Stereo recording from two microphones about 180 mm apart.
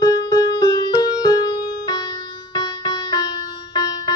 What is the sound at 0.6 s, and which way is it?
Music, 25° left (ahead or behind).